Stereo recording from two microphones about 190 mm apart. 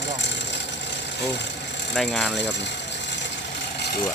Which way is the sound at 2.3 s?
65° left (ahead or behind).